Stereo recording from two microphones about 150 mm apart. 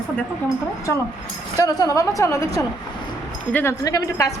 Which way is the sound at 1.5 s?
25° left (ahead or behind).